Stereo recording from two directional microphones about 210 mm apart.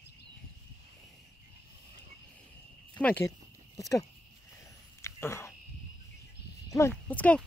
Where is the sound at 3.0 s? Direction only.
5° left (ahead or behind).